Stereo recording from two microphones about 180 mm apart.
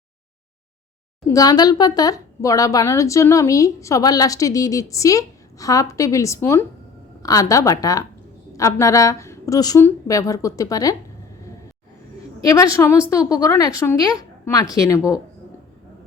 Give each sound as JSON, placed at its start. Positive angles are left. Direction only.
{"t": 1.3, "sound": "a woman's voice", "side_deg": 20}
{"t": 12.5, "sound": "a woman's voice", "side_deg": 20}